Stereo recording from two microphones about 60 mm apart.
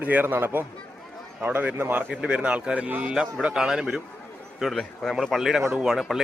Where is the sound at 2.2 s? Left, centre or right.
Centre.